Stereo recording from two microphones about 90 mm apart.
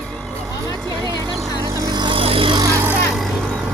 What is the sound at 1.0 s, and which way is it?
Vehicle, 50° right (ahead or behind).